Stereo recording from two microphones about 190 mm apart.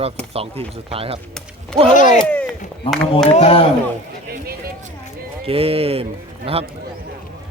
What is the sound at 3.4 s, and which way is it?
Speech, 30° left (ahead or behind).